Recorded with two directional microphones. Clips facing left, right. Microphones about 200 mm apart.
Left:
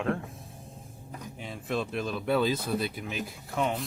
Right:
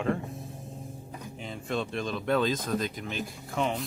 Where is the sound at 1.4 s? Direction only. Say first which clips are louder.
Even; centre (ahead or behind).